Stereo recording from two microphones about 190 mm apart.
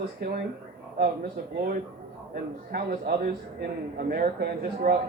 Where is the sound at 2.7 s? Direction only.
55° right (ahead or behind).